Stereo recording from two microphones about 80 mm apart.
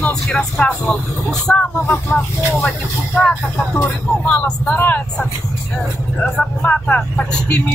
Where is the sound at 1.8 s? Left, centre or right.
Left.